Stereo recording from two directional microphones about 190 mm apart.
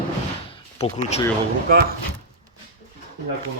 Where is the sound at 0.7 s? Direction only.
35° left (ahead or behind).